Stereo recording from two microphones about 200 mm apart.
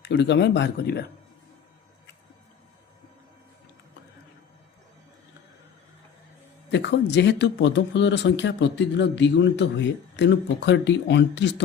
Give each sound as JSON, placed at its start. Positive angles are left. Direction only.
{"t": 0.0, "sound": "speech", "side_deg": 60}
{"t": 6.7, "sound": "speech", "side_deg": 65}